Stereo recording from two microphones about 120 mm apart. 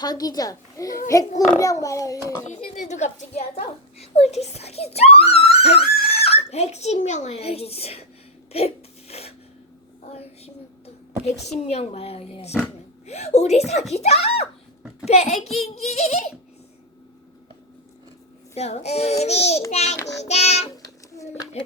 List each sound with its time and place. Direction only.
0.0 s a child's voice: 30° left (ahead or behind)
2.5 s a child's voice: 75° left (ahead or behind); by 8.0 s 60° left (ahead or behind)
8.5 s a sound: 60° left (ahead or behind)
10.1 s a child's voice: 60° left (ahead or behind)
18.5 s a child's voice: 65° left (ahead or behind)